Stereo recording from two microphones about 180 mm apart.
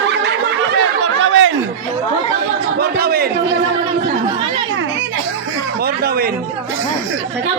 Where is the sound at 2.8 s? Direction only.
60° right (ahead or behind).